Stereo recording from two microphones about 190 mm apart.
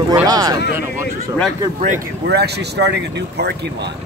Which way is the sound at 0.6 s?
60° left (ahead or behind).